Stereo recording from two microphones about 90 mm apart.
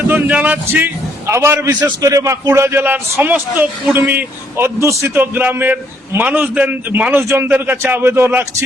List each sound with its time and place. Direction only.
0.1 s a man's voice: 20° right (ahead or behind)
1.3 s a man's voice: 30° right (ahead or behind)
5.1 s a man's voice: 20° right (ahead or behind)